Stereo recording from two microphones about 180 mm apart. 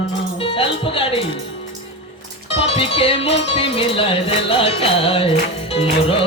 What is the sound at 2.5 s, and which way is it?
Music, 30° left (ahead or behind).